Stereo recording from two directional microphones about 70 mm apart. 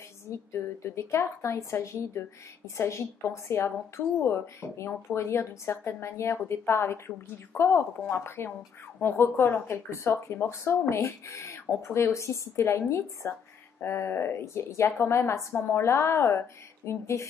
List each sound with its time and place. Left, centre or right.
0.5 s a woman's voice: left